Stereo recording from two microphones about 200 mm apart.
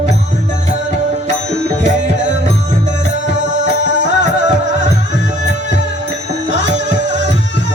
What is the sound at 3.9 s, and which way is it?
Music, 60° right (ahead or behind).